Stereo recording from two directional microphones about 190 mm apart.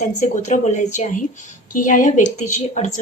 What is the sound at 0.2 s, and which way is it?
A woman's voice, 40° left (ahead or behind).